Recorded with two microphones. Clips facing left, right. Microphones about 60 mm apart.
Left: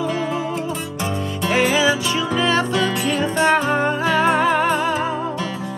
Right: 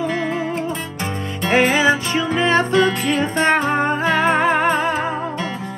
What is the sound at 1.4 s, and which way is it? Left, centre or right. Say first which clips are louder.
Music: right 2 dB; right.